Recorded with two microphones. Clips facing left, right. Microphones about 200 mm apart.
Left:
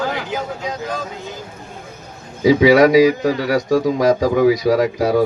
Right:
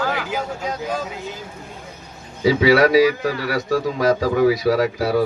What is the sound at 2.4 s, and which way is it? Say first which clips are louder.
A man's voice: left 4 dB; 15° left (ahead or behind).